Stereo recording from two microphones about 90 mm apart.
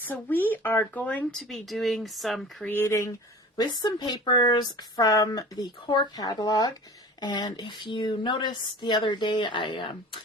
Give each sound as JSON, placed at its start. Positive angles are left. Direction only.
{"t": 0.0, "sound": "speech", "side_deg": 20}
{"t": 1.4, "sound": "speech", "side_deg": 0}
{"t": 2.6, "sound": "speech", "side_deg": 25}
{"t": 3.6, "sound": "speech", "side_deg": 50}
{"t": 6.1, "sound": "speech", "side_deg": 45}